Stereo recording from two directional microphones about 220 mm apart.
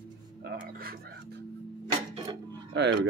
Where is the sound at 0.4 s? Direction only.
45° right (ahead or behind).